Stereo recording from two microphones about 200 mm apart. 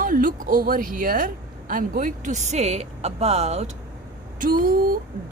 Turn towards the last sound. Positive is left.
turn(degrees=-45)  # may be behind; listen again after turning